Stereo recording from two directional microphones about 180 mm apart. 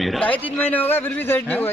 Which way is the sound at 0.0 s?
Centre (ahead or behind).